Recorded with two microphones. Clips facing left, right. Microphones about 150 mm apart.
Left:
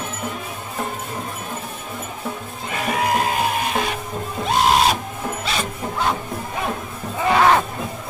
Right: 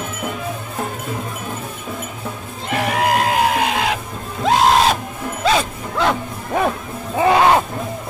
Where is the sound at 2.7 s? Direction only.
70° right (ahead or behind); by 4.0 s 90° right.